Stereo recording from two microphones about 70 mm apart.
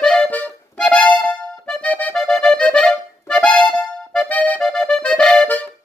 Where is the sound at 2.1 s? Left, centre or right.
Centre.